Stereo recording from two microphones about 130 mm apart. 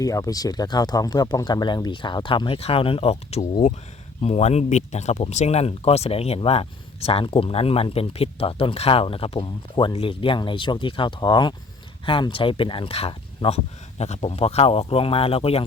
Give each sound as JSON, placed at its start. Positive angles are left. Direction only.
{"t": 0.0, "sound": "speech", "side_deg": 25}